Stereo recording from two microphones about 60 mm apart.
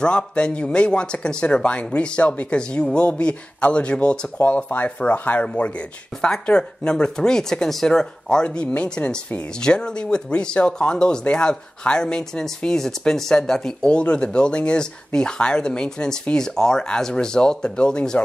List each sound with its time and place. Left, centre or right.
0.0 s speech: centre